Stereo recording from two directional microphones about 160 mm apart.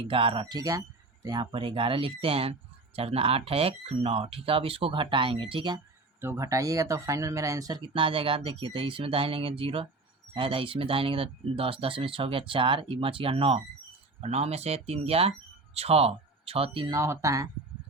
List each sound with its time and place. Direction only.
0.0 s speech: 35° right (ahead or behind)
6.1 s speech: 15° right (ahead or behind); by 16.9 s 35° right (ahead or behind)
16.9 s speech: 20° right (ahead or behind)